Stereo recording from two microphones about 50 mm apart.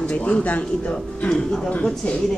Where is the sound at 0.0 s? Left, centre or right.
Left.